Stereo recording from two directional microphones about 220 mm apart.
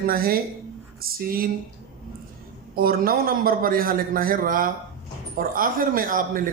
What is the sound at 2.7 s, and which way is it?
Speech, 40° right (ahead or behind).